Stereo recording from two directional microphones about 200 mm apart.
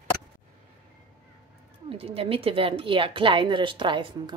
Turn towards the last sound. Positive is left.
turn(degrees=-25)  # may be behind; listen again after turning